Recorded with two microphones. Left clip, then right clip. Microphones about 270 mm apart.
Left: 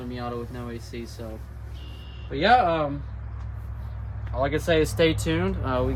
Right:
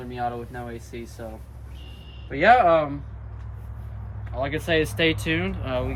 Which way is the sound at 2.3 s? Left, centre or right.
Centre.